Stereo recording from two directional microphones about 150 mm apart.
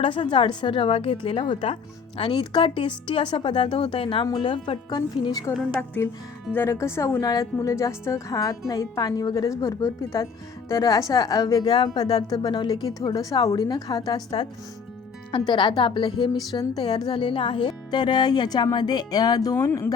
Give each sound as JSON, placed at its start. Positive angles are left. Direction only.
{"t": 0.0, "sound": "a woman's voice", "side_deg": 35}
{"t": 15.3, "sound": "a woman's voice", "side_deg": 35}